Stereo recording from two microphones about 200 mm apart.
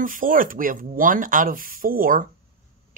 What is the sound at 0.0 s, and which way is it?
Speech, 45° right (ahead or behind).